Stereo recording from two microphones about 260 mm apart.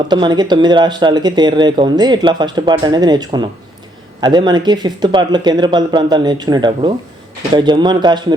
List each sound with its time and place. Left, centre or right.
0.1 s speech: centre